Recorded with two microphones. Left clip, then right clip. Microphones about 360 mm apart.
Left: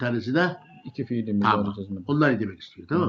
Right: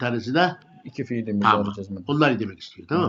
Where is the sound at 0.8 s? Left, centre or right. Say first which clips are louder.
Right 1 dB; right.